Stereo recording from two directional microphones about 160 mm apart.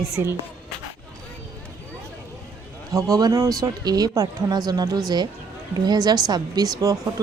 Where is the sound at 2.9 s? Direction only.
20° right (ahead or behind).